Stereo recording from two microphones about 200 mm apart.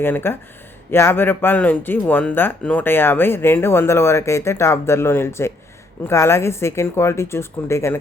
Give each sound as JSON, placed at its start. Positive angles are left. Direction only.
{"t": 0.0, "sound": "speech", "side_deg": 10}